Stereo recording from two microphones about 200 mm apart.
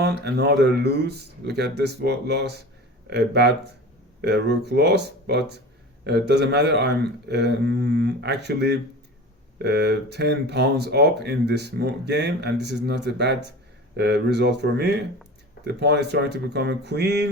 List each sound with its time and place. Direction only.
0.0 s speech: 55° right (ahead or behind)